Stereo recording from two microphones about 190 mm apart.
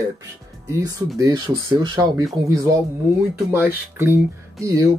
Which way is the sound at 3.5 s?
10° right (ahead or behind).